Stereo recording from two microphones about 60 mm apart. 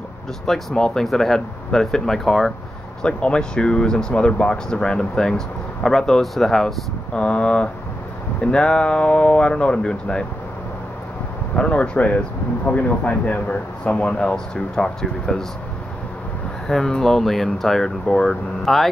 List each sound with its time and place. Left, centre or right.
0.5 s speech: centre
3.0 s speech: centre
11.5 s speech: centre
16.6 s speech: centre